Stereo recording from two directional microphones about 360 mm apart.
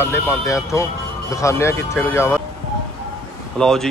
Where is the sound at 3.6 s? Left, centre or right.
Centre.